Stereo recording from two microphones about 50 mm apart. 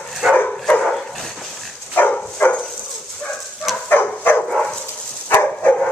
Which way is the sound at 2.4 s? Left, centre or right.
Left.